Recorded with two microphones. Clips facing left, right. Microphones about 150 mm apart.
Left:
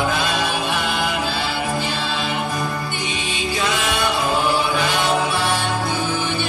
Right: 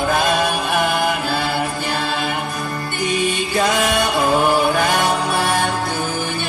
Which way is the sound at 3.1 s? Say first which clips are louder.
Right 6 dB; 50° right (ahead or behind).